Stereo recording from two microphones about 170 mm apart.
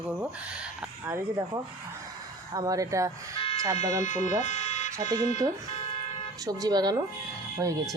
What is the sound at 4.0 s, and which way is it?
Speech, 45° left (ahead or behind).